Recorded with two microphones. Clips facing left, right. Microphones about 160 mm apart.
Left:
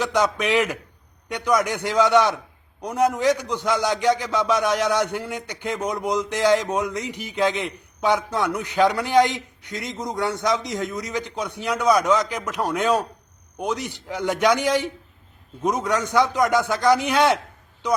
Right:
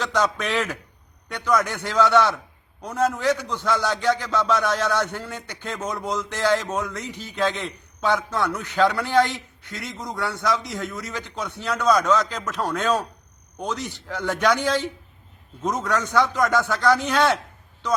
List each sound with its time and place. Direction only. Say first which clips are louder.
0.0 s a man's voice: left 2 dB; 15° left (ahead or behind)